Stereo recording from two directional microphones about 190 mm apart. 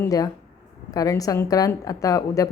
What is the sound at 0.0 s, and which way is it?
A woman's voice, 20° left (ahead or behind).